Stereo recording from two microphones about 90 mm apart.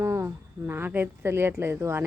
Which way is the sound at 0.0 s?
30° right (ahead or behind).